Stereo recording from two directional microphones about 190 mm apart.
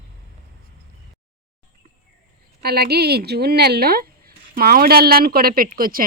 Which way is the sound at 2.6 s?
55° right (ahead or behind).